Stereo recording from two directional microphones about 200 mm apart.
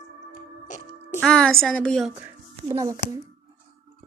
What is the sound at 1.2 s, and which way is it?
Speech, 5° left (ahead or behind).